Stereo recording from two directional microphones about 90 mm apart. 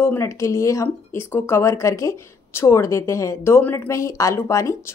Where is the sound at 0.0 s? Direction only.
30° left (ahead or behind).